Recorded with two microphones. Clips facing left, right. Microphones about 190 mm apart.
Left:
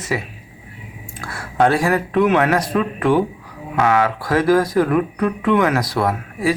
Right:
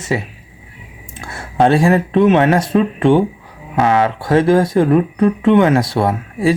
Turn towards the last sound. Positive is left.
turn(degrees=-25)  # may be behind; listen again after turning